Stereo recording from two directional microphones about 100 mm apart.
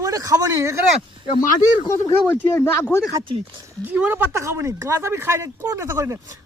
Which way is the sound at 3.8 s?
20° right (ahead or behind).